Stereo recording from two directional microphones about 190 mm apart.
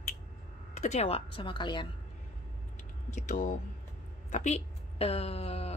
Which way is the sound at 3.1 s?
40° left (ahead or behind).